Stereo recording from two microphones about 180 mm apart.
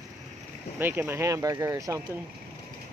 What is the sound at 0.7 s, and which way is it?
Speech, 10° right (ahead or behind).